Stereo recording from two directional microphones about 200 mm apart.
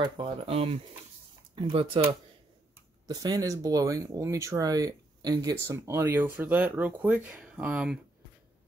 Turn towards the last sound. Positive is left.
turn(degrees=-5)  # may be behind; listen again after turning